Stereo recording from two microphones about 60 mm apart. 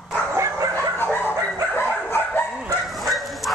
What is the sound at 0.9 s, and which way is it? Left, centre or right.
Chicken, left.